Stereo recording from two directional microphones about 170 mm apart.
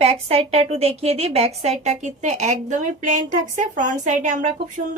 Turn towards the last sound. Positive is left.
turn(degrees=-45)  # may be behind; listen again after turning